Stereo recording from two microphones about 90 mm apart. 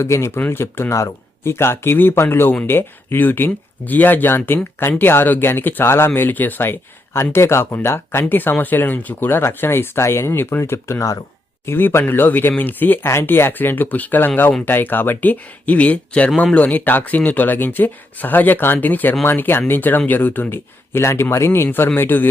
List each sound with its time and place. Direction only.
0.0 s speech: 30° left (ahead or behind)